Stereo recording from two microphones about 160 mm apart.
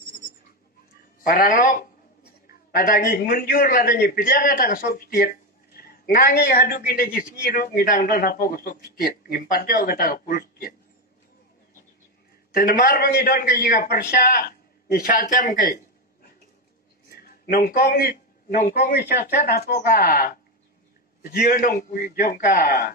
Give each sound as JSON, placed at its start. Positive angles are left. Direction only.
{"t": 1.2, "sound": "a man's voice", "side_deg": 65}
{"t": 12.5, "sound": "a man's voice", "side_deg": 65}